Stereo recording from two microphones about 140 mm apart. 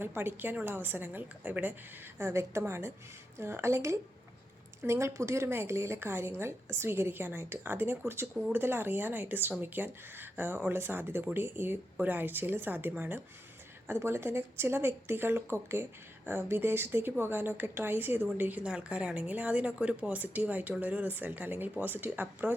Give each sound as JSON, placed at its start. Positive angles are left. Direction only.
{"t": 0.0, "sound": "a woman's voice", "side_deg": -15}